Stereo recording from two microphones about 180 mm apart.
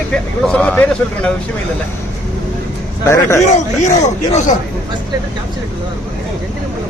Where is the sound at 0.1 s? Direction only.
5° left (ahead or behind).